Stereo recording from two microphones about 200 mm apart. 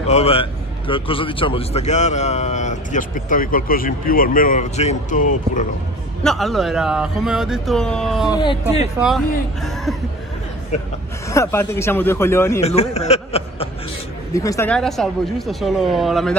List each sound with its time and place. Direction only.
0.0 s a man's voice: 30° left (ahead or behind)
6.2 s speech: centre (ahead or behind)
8.3 s speech: 20° left (ahead or behind)
9.0 s speech: centre (ahead or behind)
11.2 s speech: 15° left (ahead or behind)
12.6 s a man's voice: 30° left (ahead or behind)
14.3 s speech: 15° left (ahead or behind)
14.7 s speech: centre (ahead or behind)